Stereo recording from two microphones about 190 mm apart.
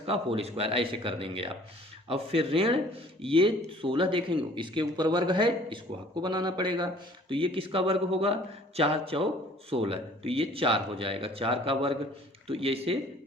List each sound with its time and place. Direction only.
0.0 s a man's voice: 30° right (ahead or behind)